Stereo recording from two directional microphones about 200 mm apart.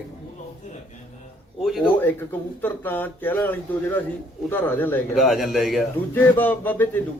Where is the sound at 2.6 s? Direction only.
10° left (ahead or behind).